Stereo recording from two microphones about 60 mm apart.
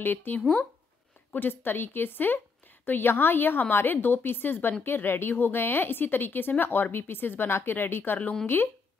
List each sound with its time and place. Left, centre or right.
0.0 s a woman's voice: left